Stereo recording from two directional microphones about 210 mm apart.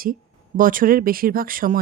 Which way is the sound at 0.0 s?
40° right (ahead or behind).